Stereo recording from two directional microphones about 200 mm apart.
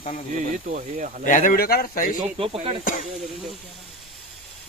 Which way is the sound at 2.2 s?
30° right (ahead or behind).